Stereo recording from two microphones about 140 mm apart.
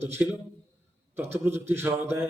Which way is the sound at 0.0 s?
15° right (ahead or behind).